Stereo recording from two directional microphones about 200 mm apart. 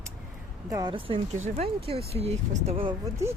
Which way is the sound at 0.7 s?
20° right (ahead or behind).